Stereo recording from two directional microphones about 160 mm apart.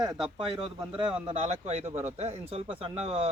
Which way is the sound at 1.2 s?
40° right (ahead or behind).